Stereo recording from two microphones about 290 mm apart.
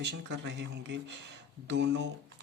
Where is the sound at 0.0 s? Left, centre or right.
Right.